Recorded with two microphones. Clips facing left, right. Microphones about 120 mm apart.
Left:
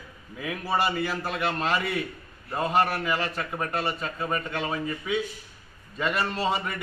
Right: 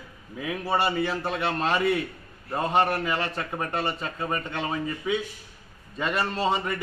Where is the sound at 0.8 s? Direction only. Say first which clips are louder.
Right 2 dB; 25° right (ahead or behind).